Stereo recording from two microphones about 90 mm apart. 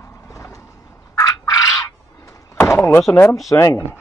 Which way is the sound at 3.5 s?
35° left (ahead or behind).